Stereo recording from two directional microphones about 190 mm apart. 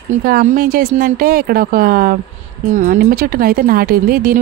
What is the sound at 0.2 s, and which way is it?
Speech, 50° right (ahead or behind).